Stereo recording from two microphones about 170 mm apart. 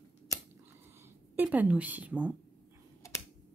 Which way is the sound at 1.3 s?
10° right (ahead or behind).